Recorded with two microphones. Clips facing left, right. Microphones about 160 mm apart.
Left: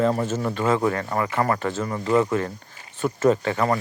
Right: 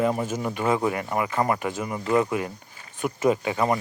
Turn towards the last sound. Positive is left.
turn(degrees=-15)  # may be behind; listen again after turning